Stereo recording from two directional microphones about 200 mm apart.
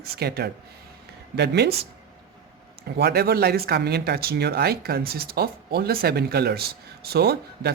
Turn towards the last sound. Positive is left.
turn(degrees=-55)  # may be behind; listen again after turning